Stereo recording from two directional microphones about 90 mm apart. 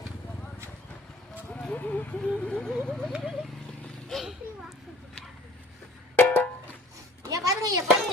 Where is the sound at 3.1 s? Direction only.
5° right (ahead or behind).